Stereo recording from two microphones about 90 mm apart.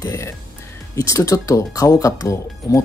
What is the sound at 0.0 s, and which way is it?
Speech, 35° left (ahead or behind).